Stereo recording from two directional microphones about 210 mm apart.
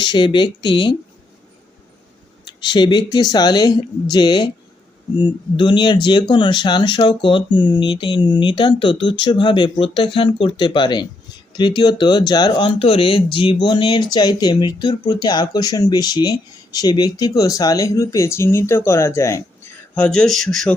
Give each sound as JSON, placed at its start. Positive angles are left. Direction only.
{"t": 0.0, "sound": "speech", "side_deg": 20}
{"t": 2.6, "sound": "speech", "side_deg": 20}